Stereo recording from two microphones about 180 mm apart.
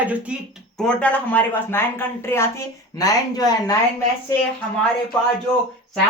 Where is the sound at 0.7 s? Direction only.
5° left (ahead or behind).